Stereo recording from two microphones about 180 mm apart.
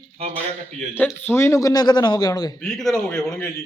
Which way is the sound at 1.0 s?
10° left (ahead or behind).